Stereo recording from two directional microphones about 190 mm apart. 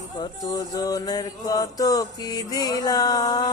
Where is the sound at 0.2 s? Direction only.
20° left (ahead or behind).